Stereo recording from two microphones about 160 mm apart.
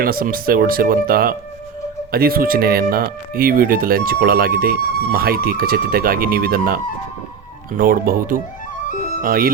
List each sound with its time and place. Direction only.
0.0 s speech: 65° right (ahead or behind)